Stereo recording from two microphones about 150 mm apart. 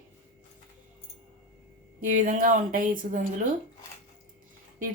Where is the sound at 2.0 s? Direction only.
65° right (ahead or behind).